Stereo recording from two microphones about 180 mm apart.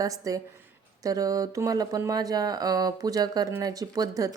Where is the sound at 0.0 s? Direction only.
20° right (ahead or behind).